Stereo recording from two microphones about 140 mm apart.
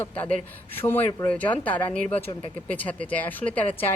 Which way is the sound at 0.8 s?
15° left (ahead or behind).